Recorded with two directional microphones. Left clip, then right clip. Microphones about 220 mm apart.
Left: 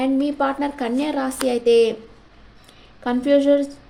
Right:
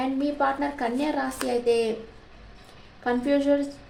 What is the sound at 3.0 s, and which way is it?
Speech, 40° left (ahead or behind).